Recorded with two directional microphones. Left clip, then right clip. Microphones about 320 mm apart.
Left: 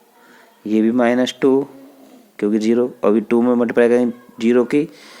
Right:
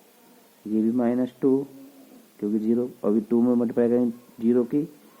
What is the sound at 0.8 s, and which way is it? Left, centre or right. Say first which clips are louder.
Speech: left 9 dB; left.